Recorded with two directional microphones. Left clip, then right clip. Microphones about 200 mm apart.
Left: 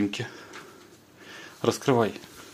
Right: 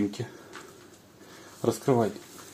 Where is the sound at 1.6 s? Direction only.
Centre (ahead or behind).